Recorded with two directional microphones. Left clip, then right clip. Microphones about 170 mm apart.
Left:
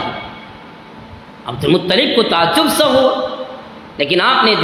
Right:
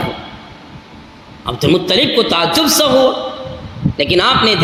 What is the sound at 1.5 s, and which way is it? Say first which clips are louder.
A man's voice: right 1 dB; 55° right (ahead or behind).